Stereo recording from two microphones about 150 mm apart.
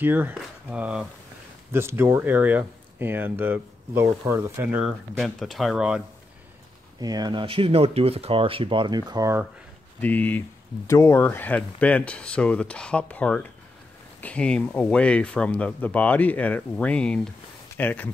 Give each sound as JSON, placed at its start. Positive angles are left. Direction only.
{"t": 0.0, "sound": "speech", "side_deg": -10}
{"t": 7.0, "sound": "speech", "side_deg": -25}
{"t": 9.9, "sound": "speech", "side_deg": 10}